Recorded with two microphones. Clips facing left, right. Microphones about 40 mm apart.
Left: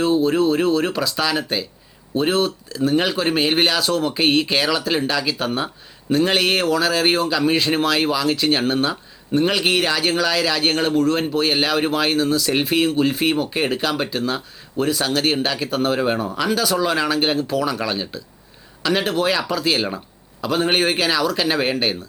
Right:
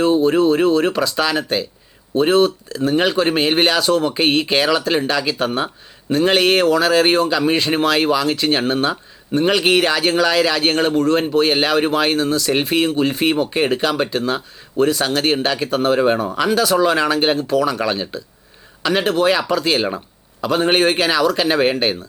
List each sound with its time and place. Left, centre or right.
0.0 s speech: centre
16.2 s speech: centre
16.5 s speech: centre